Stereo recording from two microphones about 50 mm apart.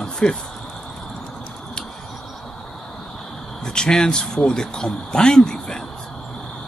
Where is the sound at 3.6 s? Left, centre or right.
Centre.